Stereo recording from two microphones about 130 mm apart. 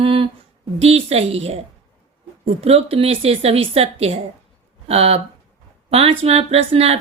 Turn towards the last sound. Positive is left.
turn(degrees=-50)  # may be behind; listen again after turning